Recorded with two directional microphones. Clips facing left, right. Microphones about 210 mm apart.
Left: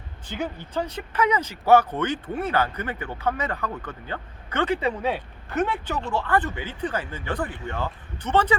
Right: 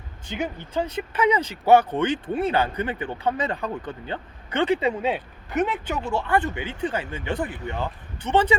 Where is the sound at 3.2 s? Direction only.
30° right (ahead or behind).